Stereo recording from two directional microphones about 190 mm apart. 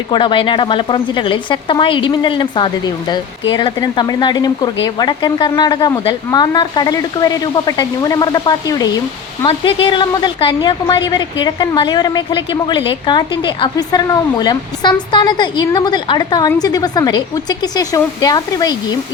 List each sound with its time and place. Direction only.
0.1 s a woman's voice: 25° left (ahead or behind)